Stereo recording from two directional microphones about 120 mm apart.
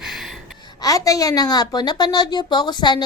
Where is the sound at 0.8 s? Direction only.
30° left (ahead or behind).